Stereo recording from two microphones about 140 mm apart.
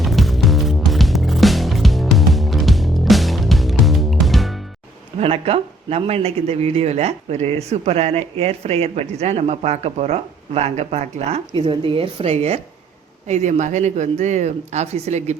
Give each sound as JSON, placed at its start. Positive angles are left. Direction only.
{"t": 0.0, "sound": "music", "side_deg": 0}
{"t": 5.2, "sound": "speech", "side_deg": -45}